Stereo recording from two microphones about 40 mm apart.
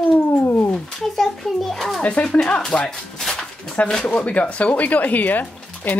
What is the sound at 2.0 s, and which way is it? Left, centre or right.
Speech, left.